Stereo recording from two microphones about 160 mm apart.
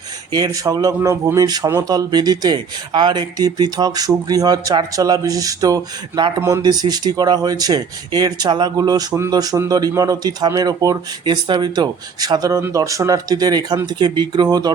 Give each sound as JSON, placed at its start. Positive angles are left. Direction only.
{"t": 0.3, "sound": "speech", "side_deg": -25}